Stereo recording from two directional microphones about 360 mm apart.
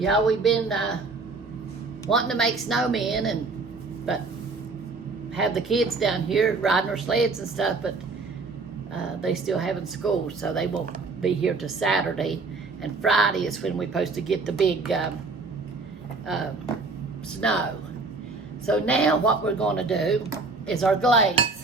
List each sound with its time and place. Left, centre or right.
0.0 s speech: centre
2.0 s speech: centre
5.4 s speech: centre
9.2 s speech: centre
16.3 s speech: centre
18.6 s speech: centre